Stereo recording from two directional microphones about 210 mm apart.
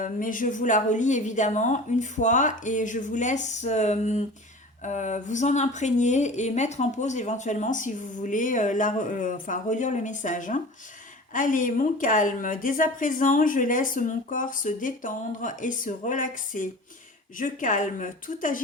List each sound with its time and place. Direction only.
0.0 s speech: 40° left (ahead or behind)